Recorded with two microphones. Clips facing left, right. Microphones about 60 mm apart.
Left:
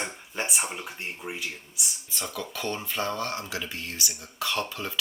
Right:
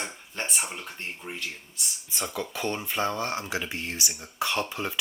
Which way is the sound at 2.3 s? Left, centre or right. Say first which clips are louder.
Right 2 dB; centre.